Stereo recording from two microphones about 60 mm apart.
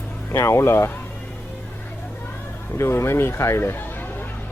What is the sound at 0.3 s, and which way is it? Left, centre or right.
Speech, left.